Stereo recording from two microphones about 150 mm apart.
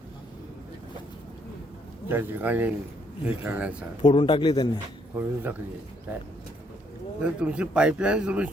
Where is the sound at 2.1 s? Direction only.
15° right (ahead or behind).